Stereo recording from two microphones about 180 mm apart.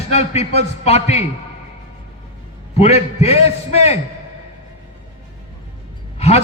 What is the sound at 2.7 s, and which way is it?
A man's voice, 35° left (ahead or behind).